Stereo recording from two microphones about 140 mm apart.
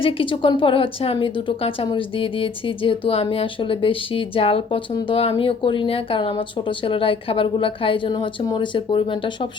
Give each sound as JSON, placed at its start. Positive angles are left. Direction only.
{"t": 0.0, "sound": "a woman's voice", "side_deg": 40}